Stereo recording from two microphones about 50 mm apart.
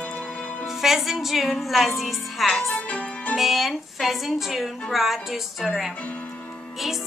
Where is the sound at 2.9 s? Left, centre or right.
Left.